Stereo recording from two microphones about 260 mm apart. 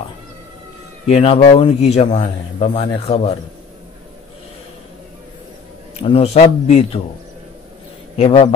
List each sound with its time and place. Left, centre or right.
1.0 s a man's voice: left
6.0 s a man's voice: left
8.2 s a man's voice: left